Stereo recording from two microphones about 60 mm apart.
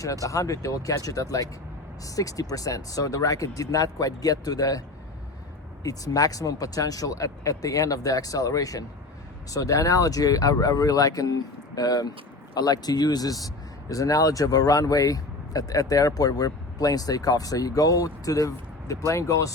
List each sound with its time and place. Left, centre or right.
0.0 s speech: left
5.8 s speech: left
9.5 s speech: left